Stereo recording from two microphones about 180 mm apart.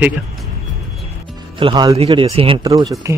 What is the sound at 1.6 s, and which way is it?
Speech, 25° right (ahead or behind).